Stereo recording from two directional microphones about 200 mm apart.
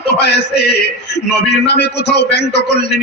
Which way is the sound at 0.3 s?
55° left (ahead or behind).